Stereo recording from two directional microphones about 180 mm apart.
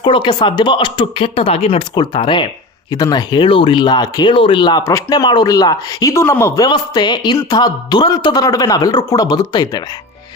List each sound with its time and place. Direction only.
0.0 s speech: 25° left (ahead or behind)